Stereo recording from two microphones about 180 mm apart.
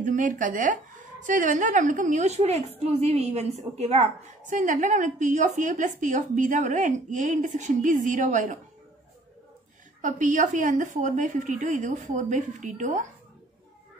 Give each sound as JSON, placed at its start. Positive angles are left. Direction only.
{"t": 0.0, "sound": "a woman's voice", "side_deg": -45}
{"t": 10.0, "sound": "a woman's voice", "side_deg": -45}